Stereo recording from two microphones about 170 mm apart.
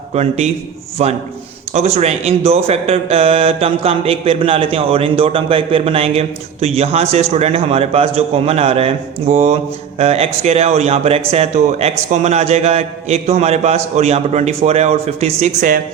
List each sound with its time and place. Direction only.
0.1 s speech: 40° right (ahead or behind)